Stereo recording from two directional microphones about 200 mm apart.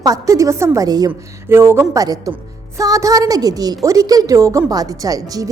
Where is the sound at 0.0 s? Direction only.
15° right (ahead or behind).